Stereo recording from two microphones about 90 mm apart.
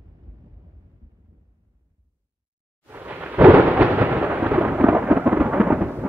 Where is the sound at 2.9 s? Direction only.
20° right (ahead or behind).